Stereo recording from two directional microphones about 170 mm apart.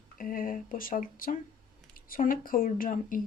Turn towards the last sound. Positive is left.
turn(degrees=55)  # may be behind; listen again after turning